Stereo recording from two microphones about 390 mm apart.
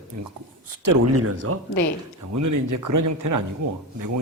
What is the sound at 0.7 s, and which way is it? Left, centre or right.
Speech, right.